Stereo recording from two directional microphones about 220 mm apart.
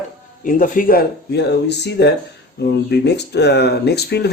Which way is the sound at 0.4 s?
35° left (ahead or behind).